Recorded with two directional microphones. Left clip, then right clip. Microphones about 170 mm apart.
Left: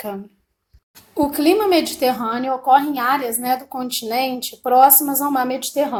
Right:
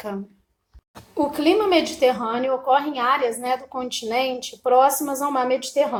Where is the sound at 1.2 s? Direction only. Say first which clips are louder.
Left 3 dB; 50° left (ahead or behind).